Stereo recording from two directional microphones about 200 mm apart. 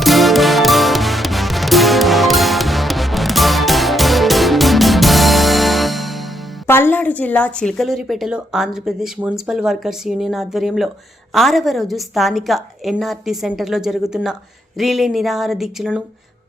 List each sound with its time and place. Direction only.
0.0 s music: centre (ahead or behind)
6.7 s a woman's voice: 10° left (ahead or behind)